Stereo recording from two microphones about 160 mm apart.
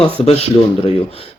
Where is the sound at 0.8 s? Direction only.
40° left (ahead or behind).